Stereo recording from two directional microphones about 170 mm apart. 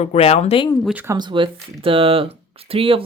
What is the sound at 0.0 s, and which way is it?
Speech, 40° left (ahead or behind).